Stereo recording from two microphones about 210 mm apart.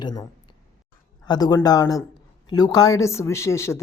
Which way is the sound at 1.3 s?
20° left (ahead or behind).